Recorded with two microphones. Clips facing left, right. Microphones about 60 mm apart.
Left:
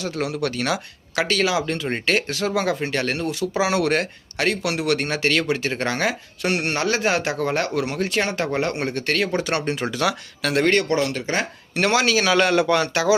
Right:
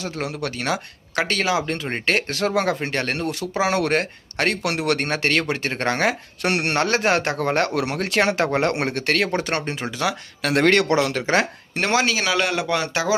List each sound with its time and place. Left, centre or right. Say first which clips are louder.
0.0 s speech: left 3 dB; right
9.3 s speech: left 1 dB; right
9.7 s speech: left 2 dB; centre
10.7 s speech: right 3 dB; right
11.7 s speech: left 2 dB; right
12.3 s speech: left 4 dB; centre
12.8 s speech: left 2 dB; right